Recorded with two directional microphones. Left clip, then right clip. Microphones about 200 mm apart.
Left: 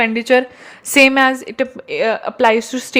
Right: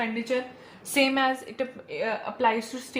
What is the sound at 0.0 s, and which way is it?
Speech, 55° left (ahead or behind).